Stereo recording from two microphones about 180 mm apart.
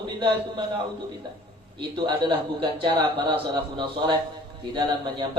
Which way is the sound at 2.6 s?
25° right (ahead or behind).